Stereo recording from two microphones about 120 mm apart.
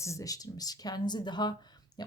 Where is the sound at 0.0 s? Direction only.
25° left (ahead or behind).